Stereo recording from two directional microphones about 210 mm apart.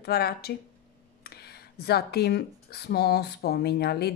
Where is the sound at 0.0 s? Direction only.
50° left (ahead or behind).